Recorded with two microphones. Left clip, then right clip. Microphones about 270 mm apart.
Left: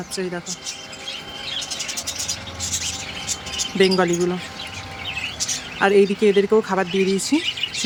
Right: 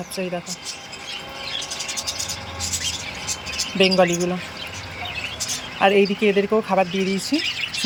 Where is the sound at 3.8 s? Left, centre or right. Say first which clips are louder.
Right 1 dB; centre.